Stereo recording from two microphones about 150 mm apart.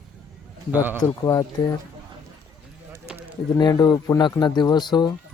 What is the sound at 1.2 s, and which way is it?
Speech, 25° left (ahead or behind).